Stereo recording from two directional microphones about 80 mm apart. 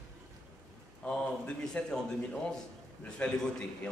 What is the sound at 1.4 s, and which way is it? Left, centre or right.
Speech, centre.